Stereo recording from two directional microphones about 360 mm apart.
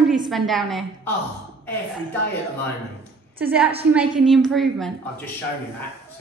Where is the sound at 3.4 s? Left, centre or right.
Centre.